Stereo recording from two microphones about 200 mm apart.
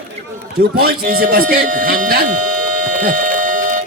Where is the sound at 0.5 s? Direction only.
50° right (ahead or behind).